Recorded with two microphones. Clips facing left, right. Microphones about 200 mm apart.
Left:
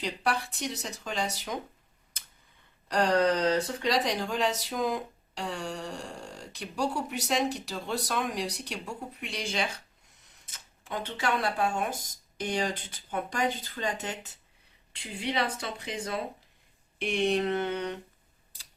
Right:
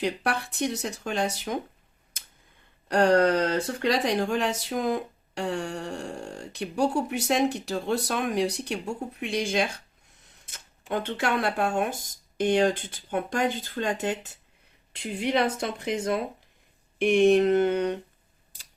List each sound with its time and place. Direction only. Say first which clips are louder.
0.0 s speech: right 3 dB; 55° right (ahead or behind)
2.9 s speech: right 4 dB; 55° right (ahead or behind)
10.8 s speech: right 4 dB; 55° right (ahead or behind)